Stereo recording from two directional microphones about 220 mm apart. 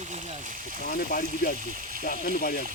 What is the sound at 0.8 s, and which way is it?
Speech, 40° left (ahead or behind).